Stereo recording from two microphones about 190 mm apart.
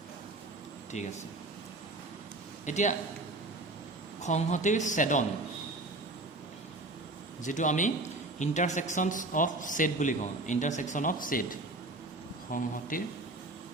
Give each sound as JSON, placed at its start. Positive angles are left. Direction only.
{"t": 0.9, "sound": "a man's voice", "side_deg": 40}
{"t": 2.6, "sound": "a man's voice", "side_deg": 40}
{"t": 4.2, "sound": "a man's voice", "side_deg": 40}
{"t": 7.4, "sound": "a man's voice", "side_deg": 40}